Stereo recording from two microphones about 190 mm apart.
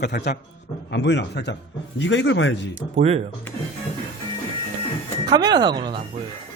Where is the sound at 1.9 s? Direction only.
80° left.